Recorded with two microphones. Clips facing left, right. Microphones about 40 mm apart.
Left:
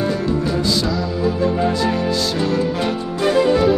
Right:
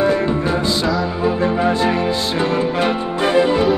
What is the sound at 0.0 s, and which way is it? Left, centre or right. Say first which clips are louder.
Music: right 3 dB; right.